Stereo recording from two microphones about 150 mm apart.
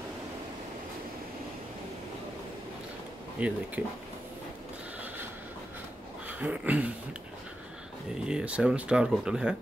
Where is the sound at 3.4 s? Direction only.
10° right (ahead or behind).